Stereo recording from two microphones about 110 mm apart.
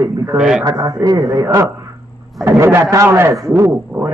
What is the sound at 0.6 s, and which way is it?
A man's voice, 35° right (ahead or behind).